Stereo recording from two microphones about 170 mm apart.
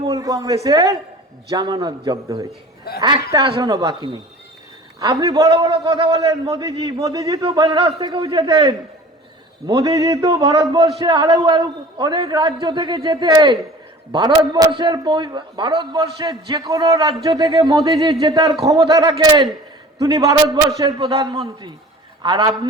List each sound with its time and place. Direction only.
0.1 s a man's voice: 20° right (ahead or behind)
3.6 s a man's voice: 20° right (ahead or behind)